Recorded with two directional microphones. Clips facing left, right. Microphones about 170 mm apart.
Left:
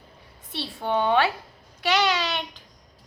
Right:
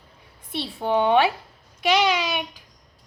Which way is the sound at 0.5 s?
20° right (ahead or behind).